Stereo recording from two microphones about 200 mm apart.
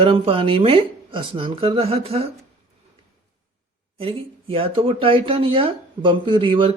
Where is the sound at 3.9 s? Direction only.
30° right (ahead or behind).